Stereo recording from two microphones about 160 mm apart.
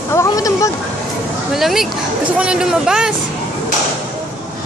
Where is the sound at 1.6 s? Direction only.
Centre (ahead or behind).